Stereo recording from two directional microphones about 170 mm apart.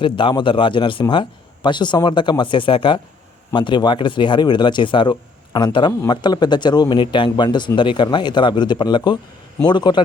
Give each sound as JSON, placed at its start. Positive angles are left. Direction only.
{"t": 0.0, "sound": "speech", "side_deg": 30}